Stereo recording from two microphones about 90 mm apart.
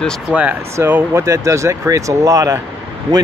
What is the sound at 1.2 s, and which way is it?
Speech, 35° right (ahead or behind).